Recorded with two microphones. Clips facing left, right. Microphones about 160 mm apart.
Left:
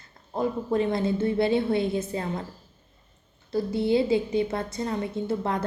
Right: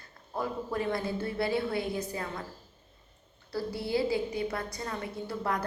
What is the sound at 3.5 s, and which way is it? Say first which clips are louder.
A woman's voice: left 8 dB; 20° left (ahead or behind).